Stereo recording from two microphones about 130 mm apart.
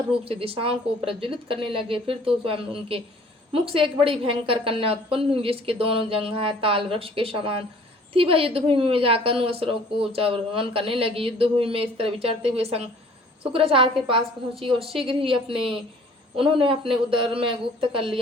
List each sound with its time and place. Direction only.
0.3 s a woman's voice: 45° right (ahead or behind)